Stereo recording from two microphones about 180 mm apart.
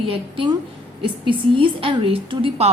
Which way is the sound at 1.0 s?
30° right (ahead or behind).